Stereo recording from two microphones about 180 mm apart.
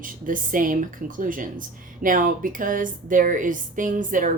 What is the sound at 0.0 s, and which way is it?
Speech, 50° right (ahead or behind).